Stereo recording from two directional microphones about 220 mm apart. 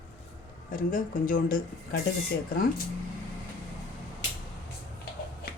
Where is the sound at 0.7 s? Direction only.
40° left (ahead or behind).